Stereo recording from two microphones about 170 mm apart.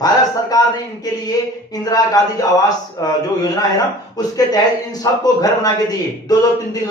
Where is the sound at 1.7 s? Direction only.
20° left (ahead or behind).